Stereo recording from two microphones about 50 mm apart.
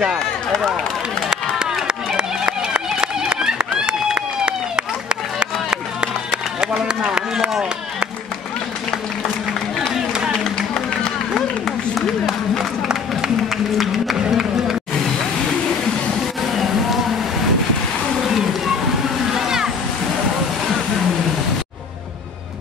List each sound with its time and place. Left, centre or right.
1.3 s run: centre
13.7 s run: centre
19.3 s a sound: centre